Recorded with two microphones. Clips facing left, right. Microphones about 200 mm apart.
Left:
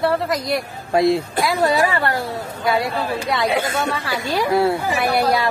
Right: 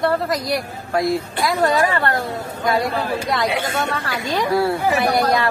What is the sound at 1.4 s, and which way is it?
Speech, 10° left (ahead or behind).